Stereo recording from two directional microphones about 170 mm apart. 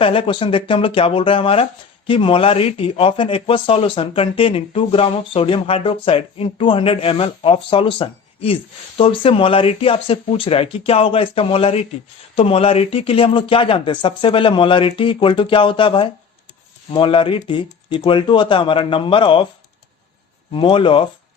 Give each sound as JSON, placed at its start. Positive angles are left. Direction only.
{"t": 0.0, "sound": "speech", "side_deg": 30}
{"t": 20.5, "sound": "speech", "side_deg": 30}